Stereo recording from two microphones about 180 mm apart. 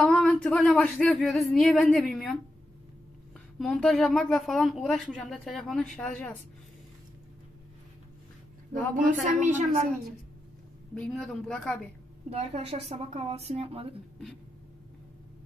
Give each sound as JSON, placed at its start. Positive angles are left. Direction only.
{"t": 0.0, "sound": "speech", "side_deg": 5}
{"t": 3.5, "sound": "speech", "side_deg": 0}
{"t": 9.0, "sound": "a woman's voice", "side_deg": -45}
{"t": 11.0, "sound": "speech", "side_deg": 5}
{"t": 12.3, "sound": "a woman's voice", "side_deg": -35}